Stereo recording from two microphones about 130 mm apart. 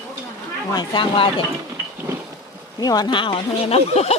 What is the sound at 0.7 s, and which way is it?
Speech, 35° left (ahead or behind).